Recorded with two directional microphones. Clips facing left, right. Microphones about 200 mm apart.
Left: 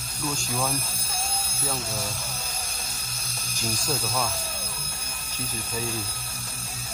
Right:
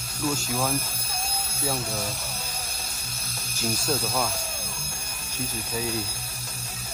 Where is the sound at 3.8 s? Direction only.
Centre (ahead or behind).